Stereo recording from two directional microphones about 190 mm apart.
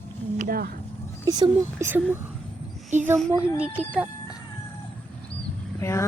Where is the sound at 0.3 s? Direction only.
50° right (ahead or behind).